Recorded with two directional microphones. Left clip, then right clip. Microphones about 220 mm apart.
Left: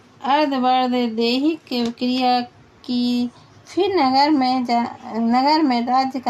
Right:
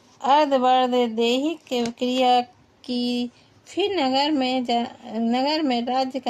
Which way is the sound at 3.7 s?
40° right (ahead or behind).